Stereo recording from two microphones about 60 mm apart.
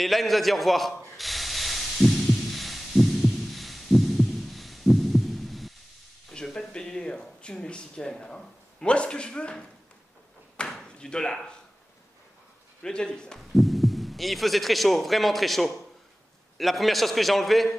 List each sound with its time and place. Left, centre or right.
0.0 s spray: centre
6.3 s speech: centre
10.6 s chop: centre
12.8 s speech: centre
13.6 s a man's voice: centre